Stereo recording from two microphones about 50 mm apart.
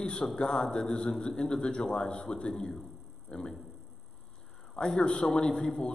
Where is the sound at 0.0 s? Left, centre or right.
Centre.